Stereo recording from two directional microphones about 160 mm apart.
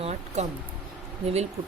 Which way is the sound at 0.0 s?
45° right (ahead or behind).